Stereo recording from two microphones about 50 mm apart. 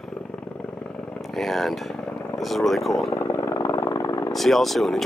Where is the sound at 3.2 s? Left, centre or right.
Left.